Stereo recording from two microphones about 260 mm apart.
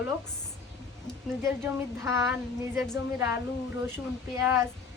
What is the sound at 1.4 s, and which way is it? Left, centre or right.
A woman's voice, centre.